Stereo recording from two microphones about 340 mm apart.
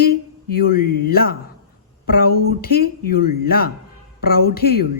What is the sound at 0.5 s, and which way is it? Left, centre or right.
A woman's voice, left.